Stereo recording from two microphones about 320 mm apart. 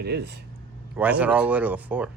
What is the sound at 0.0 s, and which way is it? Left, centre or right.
Speech, right.